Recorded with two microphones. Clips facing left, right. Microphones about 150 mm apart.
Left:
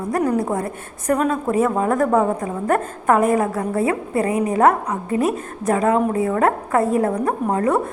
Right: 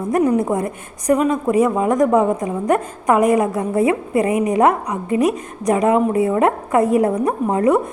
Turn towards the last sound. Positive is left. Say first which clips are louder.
# right 3 dB
turn(degrees=-20)  # may be behind; listen again after turning